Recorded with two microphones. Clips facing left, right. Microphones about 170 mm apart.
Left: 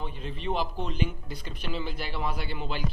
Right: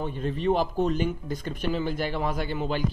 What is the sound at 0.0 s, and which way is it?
A man's voice, 50° right (ahead or behind).